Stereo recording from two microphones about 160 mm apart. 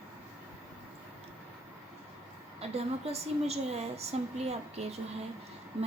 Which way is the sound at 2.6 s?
40° right (ahead or behind).